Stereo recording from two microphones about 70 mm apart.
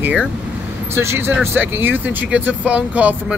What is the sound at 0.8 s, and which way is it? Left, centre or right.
Speech, right.